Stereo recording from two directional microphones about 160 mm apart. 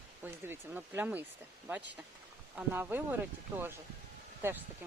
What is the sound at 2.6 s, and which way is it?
Speech, 10° right (ahead or behind).